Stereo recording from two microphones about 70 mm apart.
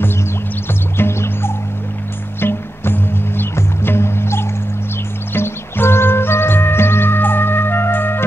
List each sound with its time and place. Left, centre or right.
0.9 s music: left